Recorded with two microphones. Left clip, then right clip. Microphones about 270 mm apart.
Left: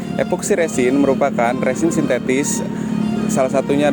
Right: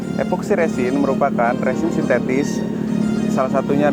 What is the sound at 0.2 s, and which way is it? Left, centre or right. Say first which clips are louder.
Speech: left 1 dB; left.